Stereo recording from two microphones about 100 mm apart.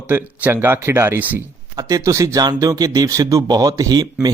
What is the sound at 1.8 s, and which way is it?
A man's voice, 35° right (ahead or behind).